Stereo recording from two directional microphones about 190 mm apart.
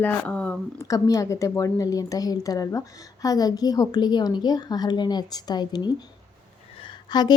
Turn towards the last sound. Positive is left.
turn(degrees=20)  # may be behind; listen again after turning